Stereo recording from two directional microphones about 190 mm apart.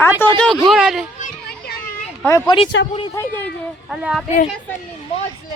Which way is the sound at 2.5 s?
25° left (ahead or behind).